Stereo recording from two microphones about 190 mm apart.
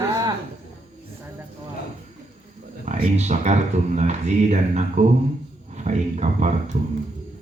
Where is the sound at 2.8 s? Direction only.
35° right (ahead or behind).